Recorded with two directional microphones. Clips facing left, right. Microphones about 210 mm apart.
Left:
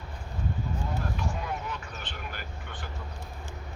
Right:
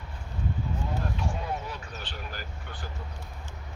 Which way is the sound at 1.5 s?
35° right (ahead or behind).